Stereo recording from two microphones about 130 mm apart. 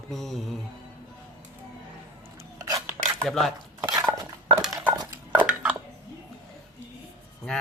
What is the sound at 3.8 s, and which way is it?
Dishes, 35° right (ahead or behind).